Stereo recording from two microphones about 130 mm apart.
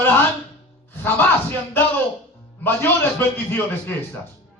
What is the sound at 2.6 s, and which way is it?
Speech, 15° left (ahead or behind).